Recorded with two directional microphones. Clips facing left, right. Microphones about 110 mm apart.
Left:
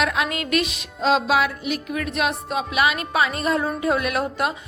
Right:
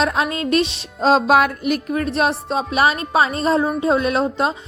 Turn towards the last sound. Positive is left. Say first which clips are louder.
# right 4 dB
turn(degrees=-25)  # may be behind; listen again after turning